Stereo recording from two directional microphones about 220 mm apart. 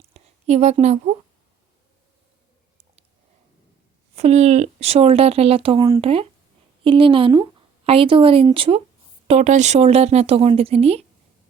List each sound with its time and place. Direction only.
0.1 s a woman's voice: 30° right (ahead or behind)
4.1 s speech: 30° right (ahead or behind)